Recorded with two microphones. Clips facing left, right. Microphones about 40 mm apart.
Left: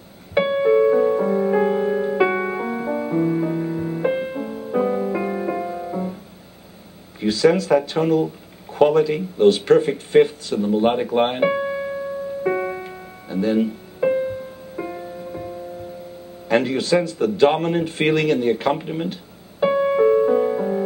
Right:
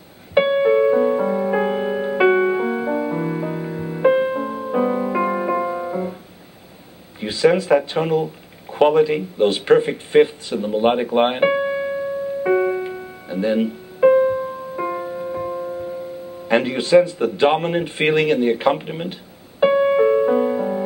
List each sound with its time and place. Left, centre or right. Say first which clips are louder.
0.3 s music: right 2 dB; centre
7.2 s speech: even; centre
12.4 s piano: right 5 dB; centre
14.8 s music: right 5 dB; right
16.4 s speech: even; centre
19.6 s music: right 2 dB; right